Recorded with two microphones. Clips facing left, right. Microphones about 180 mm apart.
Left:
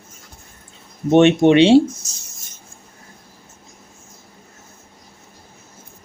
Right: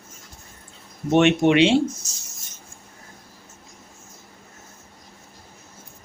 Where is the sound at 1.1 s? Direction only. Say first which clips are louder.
Left 5 dB; 25° left (ahead or behind).